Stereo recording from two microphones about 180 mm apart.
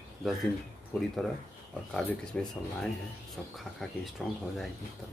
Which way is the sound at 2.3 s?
5° left (ahead or behind).